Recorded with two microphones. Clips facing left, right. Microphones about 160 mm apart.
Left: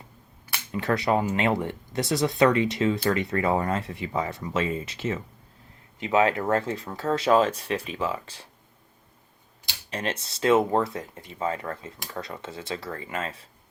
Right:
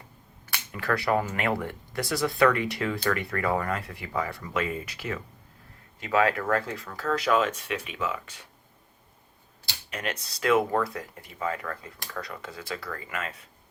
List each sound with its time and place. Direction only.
0.7 s speech: 25° left (ahead or behind)
9.9 s speech: 30° left (ahead or behind)